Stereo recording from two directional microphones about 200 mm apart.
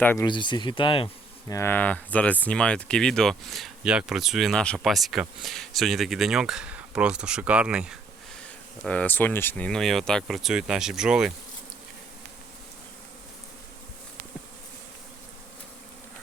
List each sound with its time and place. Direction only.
0.0 s speech: 10° left (ahead or behind)
0.3 s speech: 25° left (ahead or behind)
1.5 s speech: 10° left (ahead or behind)